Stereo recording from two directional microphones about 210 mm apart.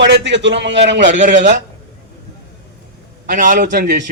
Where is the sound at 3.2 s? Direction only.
40° right (ahead or behind).